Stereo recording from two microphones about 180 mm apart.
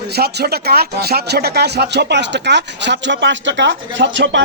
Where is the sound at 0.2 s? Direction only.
60° right (ahead or behind).